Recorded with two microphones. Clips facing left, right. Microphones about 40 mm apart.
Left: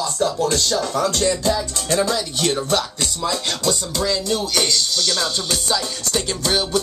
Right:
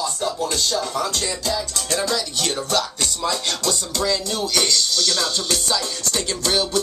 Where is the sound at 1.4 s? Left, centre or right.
Left.